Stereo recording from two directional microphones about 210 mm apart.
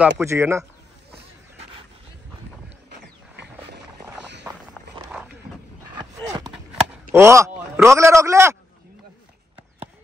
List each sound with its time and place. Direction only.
0.2 s speech: 15° right (ahead or behind)
3.0 s a sound: 55° right (ahead or behind)
6.7 s a man's voice: 10° right (ahead or behind)